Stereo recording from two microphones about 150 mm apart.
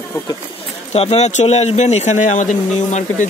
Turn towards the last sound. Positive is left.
turn(degrees=50)  # may be behind; listen again after turning